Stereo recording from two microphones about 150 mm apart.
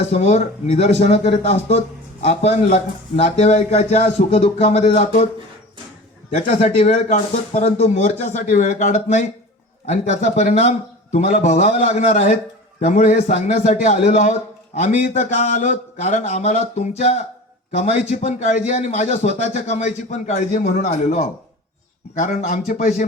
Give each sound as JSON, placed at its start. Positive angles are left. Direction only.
{"t": 0.0, "sound": "a man's voice", "side_deg": 50}
{"t": 6.3, "sound": "a man's voice", "side_deg": 50}